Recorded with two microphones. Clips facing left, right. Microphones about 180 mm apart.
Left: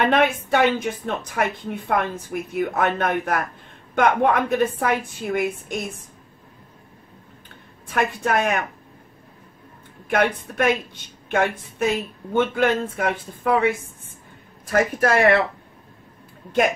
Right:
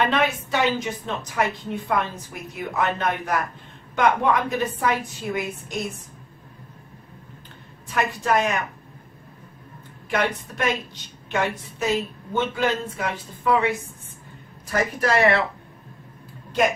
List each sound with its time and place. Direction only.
0.0 s a woman's voice: 55° left (ahead or behind)
7.9 s a woman's voice: 55° left (ahead or behind)
10.0 s a woman's voice: 55° left (ahead or behind)